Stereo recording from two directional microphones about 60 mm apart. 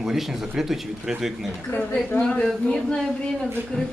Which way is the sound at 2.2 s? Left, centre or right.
Centre.